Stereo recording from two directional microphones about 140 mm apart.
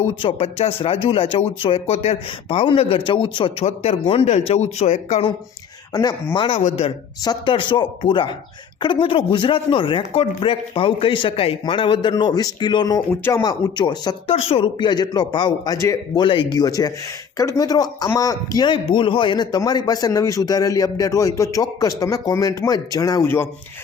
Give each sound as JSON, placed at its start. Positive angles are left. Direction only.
{"t": 0.2, "sound": "speech", "side_deg": 40}
{"t": 5.9, "sound": "a man's voice", "side_deg": 25}
{"t": 6.3, "sound": "speech", "side_deg": 35}
{"t": 6.6, "sound": "speech", "side_deg": 50}
{"t": 7.3, "sound": "speech", "side_deg": 35}
{"t": 13.1, "sound": "speech", "side_deg": 15}
{"t": 13.4, "sound": "a man's voice", "side_deg": 30}
{"t": 14.3, "sound": "speech", "side_deg": 45}
{"t": 16.2, "sound": "a man's voice", "side_deg": 35}
{"t": 23.2, "sound": "speech", "side_deg": 15}